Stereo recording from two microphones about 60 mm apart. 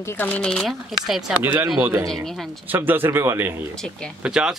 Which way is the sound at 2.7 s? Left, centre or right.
Right.